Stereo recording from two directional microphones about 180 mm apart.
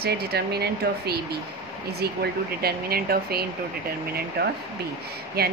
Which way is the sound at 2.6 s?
60° right (ahead or behind).